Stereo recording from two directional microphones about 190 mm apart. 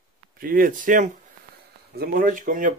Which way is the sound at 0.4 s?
50° right (ahead or behind).